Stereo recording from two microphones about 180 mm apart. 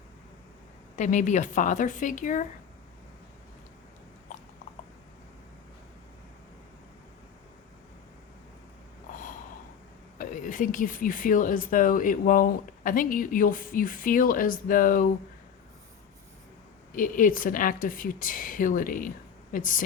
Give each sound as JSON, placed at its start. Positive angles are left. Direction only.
{"t": 0.9, "sound": "speech", "side_deg": 45}
{"t": 10.2, "sound": "speech", "side_deg": 45}
{"t": 16.9, "sound": "speech", "side_deg": 50}